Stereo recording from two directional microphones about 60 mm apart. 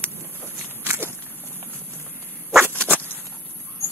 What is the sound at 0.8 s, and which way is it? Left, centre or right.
Walk, right.